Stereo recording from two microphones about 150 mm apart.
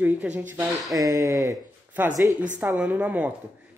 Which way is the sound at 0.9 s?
20° right (ahead or behind).